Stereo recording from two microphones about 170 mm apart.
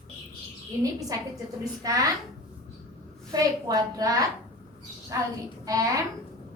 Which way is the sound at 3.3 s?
20° right (ahead or behind).